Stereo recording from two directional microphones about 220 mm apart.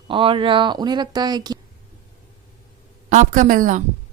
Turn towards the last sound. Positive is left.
turn(degrees=-35)  # may be behind; listen again after turning